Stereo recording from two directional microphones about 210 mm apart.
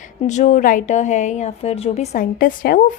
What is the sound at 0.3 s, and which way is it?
A woman's voice, 35° left (ahead or behind).